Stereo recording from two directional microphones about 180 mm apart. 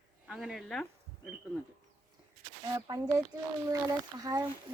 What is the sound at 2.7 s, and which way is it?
Speech, 20° right (ahead or behind).